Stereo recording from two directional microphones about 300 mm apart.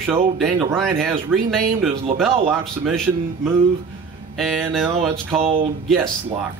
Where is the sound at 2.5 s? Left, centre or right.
Centre.